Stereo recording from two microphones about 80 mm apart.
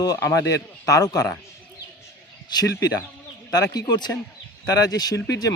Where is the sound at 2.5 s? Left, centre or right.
Left.